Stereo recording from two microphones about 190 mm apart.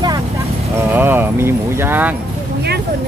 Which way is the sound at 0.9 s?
10° right (ahead or behind).